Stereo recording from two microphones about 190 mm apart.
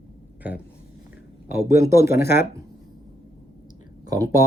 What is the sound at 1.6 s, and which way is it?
Speech, 15° right (ahead or behind).